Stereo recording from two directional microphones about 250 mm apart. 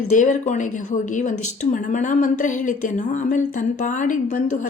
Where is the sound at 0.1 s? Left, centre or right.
Left.